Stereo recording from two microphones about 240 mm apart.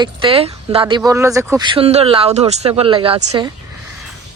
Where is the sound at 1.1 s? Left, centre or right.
Centre.